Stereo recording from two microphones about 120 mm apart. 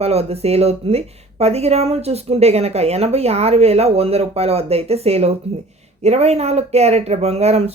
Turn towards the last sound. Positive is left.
turn(degrees=-60)  # may be behind; listen again after turning